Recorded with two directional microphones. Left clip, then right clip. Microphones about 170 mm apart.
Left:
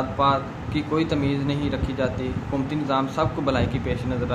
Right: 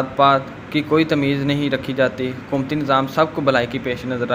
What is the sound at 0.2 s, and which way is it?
A man's voice, 35° right (ahead or behind).